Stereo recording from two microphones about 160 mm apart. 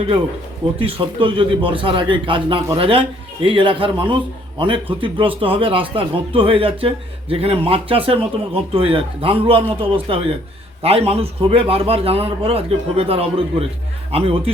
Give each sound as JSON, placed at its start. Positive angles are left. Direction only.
{"t": 0.8, "sound": "a man's voice", "side_deg": -30}